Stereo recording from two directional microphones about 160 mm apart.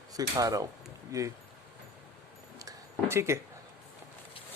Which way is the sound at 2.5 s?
20° right (ahead or behind).